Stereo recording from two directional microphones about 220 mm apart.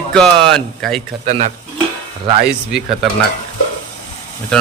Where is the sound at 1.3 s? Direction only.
30° right (ahead or behind).